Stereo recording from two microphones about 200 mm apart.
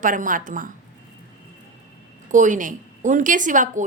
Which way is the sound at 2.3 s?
40° right (ahead or behind).